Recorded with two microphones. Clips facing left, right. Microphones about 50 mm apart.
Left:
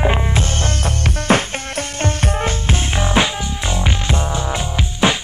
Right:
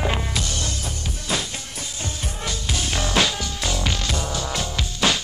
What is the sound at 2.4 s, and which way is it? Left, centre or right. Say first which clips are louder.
Music: left 6 dB; left.